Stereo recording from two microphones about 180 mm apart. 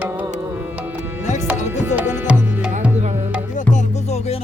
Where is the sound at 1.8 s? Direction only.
10° right (ahead or behind).